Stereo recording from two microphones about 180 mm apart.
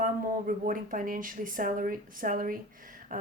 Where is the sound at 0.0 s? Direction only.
50° right (ahead or behind).